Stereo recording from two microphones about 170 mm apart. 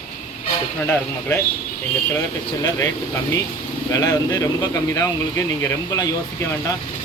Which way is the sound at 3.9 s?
20° left (ahead or behind).